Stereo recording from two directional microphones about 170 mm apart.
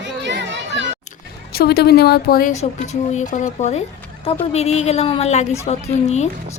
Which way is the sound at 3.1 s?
45° left (ahead or behind).